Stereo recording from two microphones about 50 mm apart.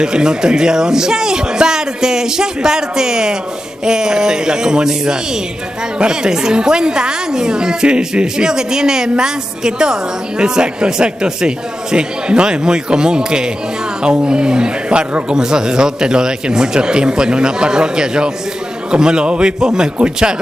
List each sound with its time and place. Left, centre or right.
0.0 s a woman's voice: centre